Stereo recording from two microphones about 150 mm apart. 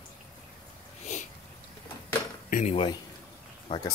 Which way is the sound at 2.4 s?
60° left (ahead or behind).